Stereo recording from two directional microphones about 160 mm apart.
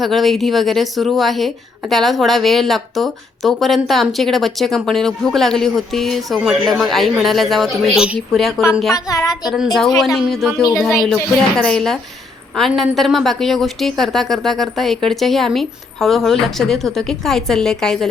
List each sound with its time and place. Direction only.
0.0 s speech: centre (ahead or behind)
9.0 s a woman's voice: 20° left (ahead or behind)
10.2 s speech: centre (ahead or behind)